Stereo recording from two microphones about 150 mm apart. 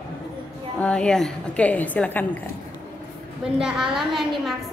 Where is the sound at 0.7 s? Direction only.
5° left (ahead or behind).